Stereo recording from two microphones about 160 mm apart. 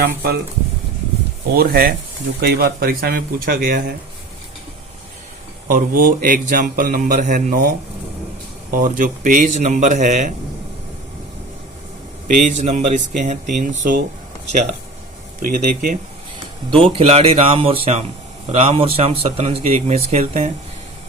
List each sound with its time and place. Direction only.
0.0 s speech: 80° right
1.5 s speech: 70° right (ahead or behind)
5.6 s speech: 60° right (ahead or behind)
8.7 s speech: 55° right (ahead or behind)
12.5 s speech: 50° right (ahead or behind)
15.4 s speech: 65° right (ahead or behind)
16.7 s speech: 35° right (ahead or behind)